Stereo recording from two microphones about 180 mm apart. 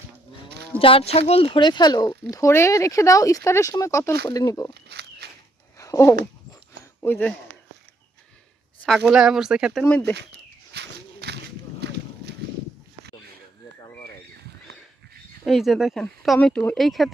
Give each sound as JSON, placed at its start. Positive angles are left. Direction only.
{"t": 0.8, "sound": "speech", "side_deg": 30}
{"t": 4.7, "sound": "walk", "side_deg": -65}
{"t": 5.7, "sound": "a sound", "side_deg": 15}
{"t": 7.0, "sound": "speech", "side_deg": 10}
{"t": 9.0, "sound": "speech", "side_deg": -5}
{"t": 10.2, "sound": "a sound", "side_deg": -70}
{"t": 15.4, "sound": "speech", "side_deg": 0}